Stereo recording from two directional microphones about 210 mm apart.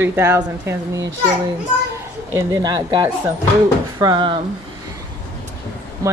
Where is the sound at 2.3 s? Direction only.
20° right (ahead or behind).